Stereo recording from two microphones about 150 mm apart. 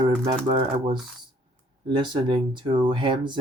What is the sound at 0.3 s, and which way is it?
Speech, 30° right (ahead or behind).